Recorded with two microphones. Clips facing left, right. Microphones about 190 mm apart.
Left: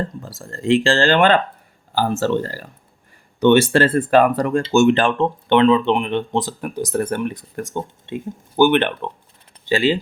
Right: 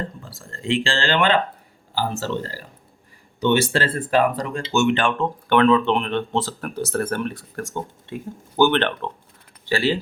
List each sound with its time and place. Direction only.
0.2 s speech: 40° left (ahead or behind)
4.7 s speech: 40° left (ahead or behind)
5.5 s speech: 20° left (ahead or behind)